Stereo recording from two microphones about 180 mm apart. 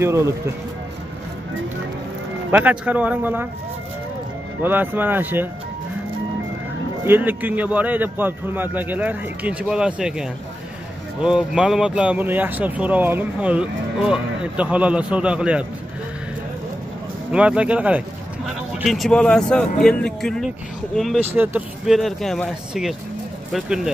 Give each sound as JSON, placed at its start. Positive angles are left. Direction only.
{"t": 0.0, "sound": "speech", "side_deg": -15}
{"t": 2.5, "sound": "speech", "side_deg": -5}
{"t": 4.6, "sound": "speech", "side_deg": -10}
{"t": 7.1, "sound": "speech", "side_deg": -10}
{"t": 17.3, "sound": "speech", "side_deg": -5}
{"t": 21.2, "sound": "speech", "side_deg": -10}